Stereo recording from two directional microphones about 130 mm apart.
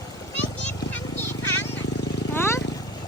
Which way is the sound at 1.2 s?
20° left (ahead or behind).